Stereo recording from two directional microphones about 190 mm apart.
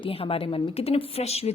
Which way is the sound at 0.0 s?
30° left (ahead or behind).